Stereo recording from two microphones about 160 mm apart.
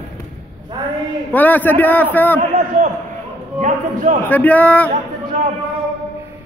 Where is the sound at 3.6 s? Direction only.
50° right (ahead or behind).